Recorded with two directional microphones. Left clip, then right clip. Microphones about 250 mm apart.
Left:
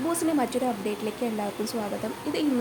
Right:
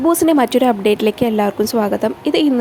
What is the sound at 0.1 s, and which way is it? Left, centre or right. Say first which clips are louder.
Speech: right 13 dB; right.